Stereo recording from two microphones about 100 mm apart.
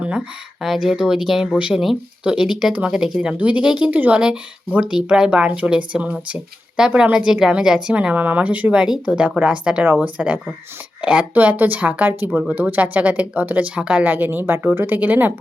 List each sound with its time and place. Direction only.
0.6 s speech: 5° right (ahead or behind)